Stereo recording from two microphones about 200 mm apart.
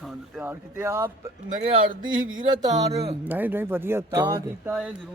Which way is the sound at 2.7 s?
30° right (ahead or behind).